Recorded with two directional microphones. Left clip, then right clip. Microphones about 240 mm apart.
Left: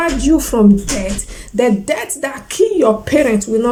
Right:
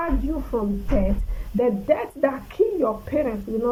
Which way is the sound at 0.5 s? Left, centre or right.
Left.